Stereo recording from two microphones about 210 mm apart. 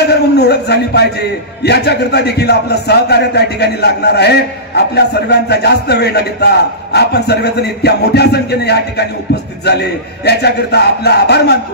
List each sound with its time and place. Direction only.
0.0 s a man's voice: 50° left (ahead or behind)